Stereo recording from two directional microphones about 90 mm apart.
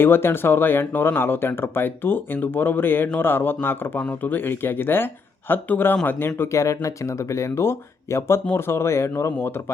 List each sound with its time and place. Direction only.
0.0 s speech: 25° left (ahead or behind)